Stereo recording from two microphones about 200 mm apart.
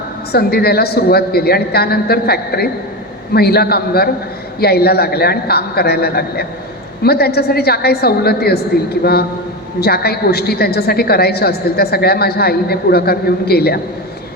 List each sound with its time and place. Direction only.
0.3 s a woman's voice: 50° left (ahead or behind)
9.8 s a woman's voice: 50° left (ahead or behind)